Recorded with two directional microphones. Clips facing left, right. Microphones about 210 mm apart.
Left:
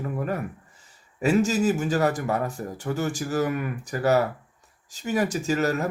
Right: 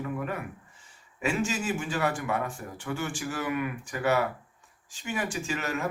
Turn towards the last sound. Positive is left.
turn(degrees=40)  # may be behind; listen again after turning